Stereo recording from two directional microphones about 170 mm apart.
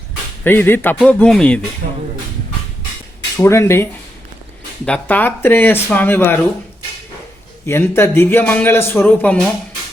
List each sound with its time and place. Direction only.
0.4 s a man's voice: 10° left (ahead or behind)
1.8 s speech: 65° right (ahead or behind)
3.3 s a man's voice: 15° left (ahead or behind)
4.9 s a man's voice: 10° left (ahead or behind)
7.7 s a man's voice: 15° left (ahead or behind)